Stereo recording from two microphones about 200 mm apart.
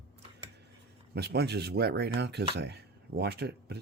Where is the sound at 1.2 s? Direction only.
55° right (ahead or behind).